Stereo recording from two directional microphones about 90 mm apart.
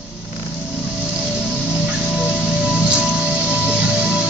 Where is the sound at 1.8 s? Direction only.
10° right (ahead or behind).